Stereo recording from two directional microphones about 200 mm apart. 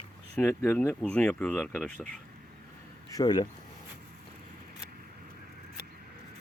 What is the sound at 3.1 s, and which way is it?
Speech, 20° left (ahead or behind).